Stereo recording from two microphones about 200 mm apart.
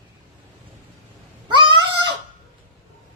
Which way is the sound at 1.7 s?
20° right (ahead or behind).